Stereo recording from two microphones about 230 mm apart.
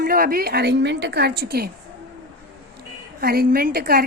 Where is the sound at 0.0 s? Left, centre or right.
Right.